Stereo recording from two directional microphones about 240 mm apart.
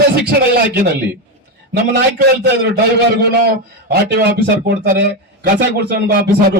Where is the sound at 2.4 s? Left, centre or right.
Right.